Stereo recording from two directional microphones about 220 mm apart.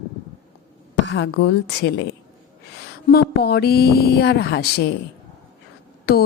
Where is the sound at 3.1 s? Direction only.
45° left (ahead or behind).